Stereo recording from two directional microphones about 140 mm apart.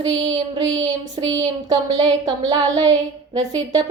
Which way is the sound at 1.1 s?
30° right (ahead or behind).